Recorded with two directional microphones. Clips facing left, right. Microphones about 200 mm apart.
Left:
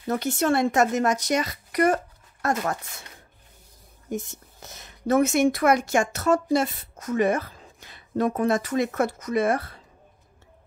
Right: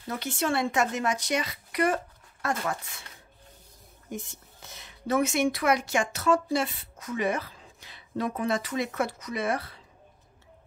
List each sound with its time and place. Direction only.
0.1 s speech: 45° left (ahead or behind)
4.1 s speech: 45° left (ahead or behind)